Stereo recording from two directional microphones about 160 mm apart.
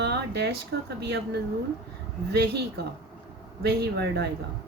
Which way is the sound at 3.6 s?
90° right.